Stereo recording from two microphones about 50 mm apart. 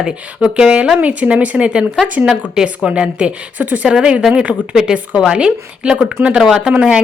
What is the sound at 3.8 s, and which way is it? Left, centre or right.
Speech, centre.